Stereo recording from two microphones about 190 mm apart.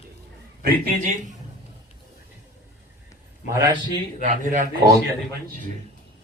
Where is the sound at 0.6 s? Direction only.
40° right (ahead or behind).